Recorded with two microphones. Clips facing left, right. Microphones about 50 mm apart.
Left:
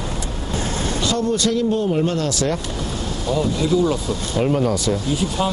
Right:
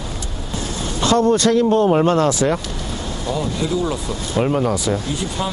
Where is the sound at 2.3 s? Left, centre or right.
Centre.